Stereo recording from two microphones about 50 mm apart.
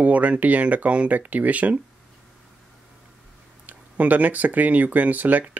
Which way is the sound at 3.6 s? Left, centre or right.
Right.